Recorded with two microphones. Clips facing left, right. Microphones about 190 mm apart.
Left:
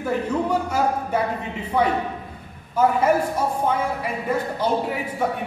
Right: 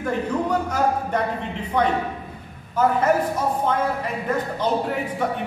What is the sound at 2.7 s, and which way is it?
A man's voice, 10° left (ahead or behind).